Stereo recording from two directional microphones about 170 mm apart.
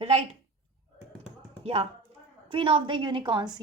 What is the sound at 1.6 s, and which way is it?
A woman's voice, 35° right (ahead or behind).